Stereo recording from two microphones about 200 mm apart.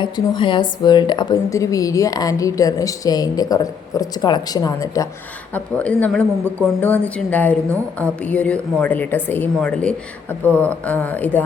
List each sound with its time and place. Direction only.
0.0 s a woman's voice: 25° left (ahead or behind)
5.5 s speech: 5° left (ahead or behind)